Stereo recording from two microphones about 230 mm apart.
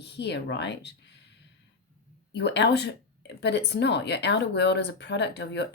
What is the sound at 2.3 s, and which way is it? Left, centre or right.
Speech, left.